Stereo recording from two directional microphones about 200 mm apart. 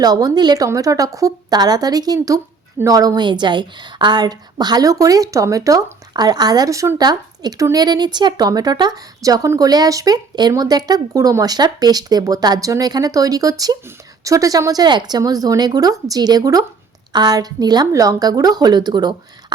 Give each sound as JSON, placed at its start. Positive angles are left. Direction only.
{"t": 0.0, "sound": "a woman's voice", "side_deg": -20}